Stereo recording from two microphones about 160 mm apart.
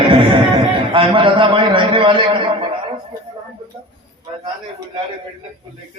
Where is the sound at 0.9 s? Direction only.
30° right (ahead or behind).